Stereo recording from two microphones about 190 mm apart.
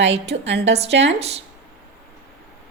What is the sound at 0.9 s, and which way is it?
Speech, 70° right (ahead or behind).